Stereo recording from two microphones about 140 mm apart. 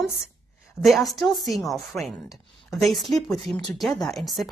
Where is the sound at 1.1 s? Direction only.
Centre (ahead or behind).